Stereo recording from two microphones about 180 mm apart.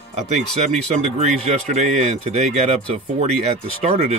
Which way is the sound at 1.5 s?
40° right (ahead or behind).